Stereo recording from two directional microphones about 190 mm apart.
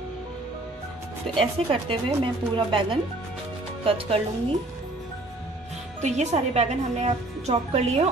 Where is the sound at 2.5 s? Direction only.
25° right (ahead or behind).